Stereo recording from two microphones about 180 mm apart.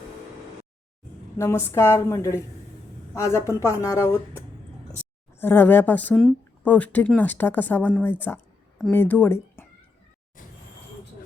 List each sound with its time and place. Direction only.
1.4 s speech: 15° left (ahead or behind)